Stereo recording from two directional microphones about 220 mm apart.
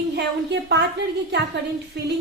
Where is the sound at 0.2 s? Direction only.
50° right (ahead or behind).